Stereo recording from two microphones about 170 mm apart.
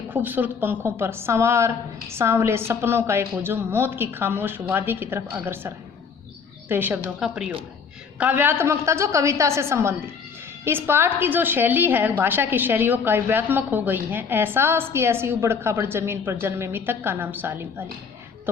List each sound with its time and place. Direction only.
0.1 s a woman's voice: 10° right (ahead or behind)